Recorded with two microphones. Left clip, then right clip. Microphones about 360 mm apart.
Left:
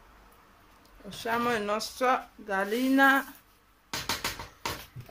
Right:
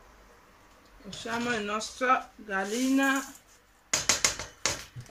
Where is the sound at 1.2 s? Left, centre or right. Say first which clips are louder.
Left 3 dB; centre.